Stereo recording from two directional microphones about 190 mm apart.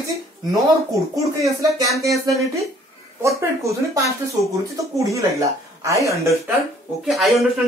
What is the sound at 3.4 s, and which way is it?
Speech, 15° right (ahead or behind).